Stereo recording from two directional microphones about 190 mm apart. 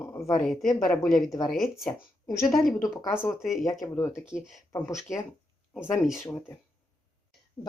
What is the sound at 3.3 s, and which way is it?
Speech, centre (ahead or behind).